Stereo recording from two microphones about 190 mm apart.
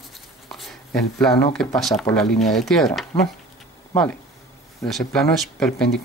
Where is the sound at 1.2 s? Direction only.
5° left (ahead or behind).